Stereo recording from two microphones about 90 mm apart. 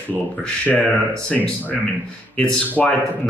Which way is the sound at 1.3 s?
10° left (ahead or behind).